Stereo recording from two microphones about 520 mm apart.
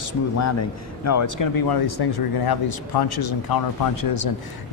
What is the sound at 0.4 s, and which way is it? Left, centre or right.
Speech, left.